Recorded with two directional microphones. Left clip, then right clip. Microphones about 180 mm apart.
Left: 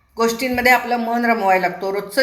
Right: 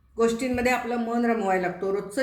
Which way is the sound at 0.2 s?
15° right (ahead or behind).